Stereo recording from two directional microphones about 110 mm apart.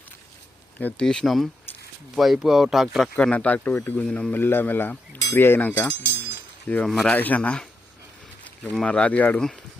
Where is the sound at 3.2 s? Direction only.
10° left (ahead or behind).